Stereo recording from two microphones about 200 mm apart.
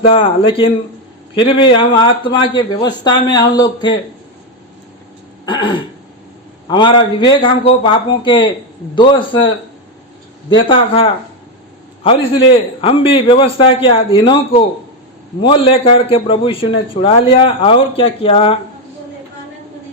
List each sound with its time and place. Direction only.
0.0 s a man's voice: 25° left (ahead or behind)
5.5 s a man's voice: 25° left (ahead or behind)
10.5 s a man's voice: 25° left (ahead or behind)
12.8 s a man's voice: 25° left (ahead or behind)